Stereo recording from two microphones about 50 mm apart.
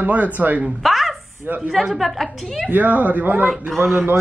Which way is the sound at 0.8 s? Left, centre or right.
Centre.